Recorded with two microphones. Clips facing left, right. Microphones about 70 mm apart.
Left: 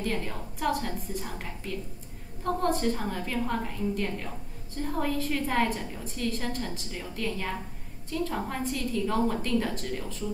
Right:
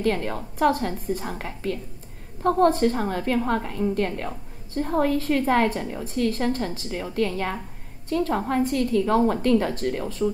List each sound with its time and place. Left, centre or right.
0.0 s a woman's voice: right